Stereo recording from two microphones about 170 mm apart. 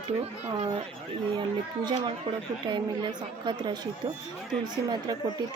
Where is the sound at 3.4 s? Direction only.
25° right (ahead or behind).